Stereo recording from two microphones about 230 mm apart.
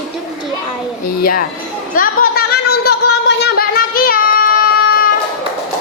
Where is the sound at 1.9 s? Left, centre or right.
Left.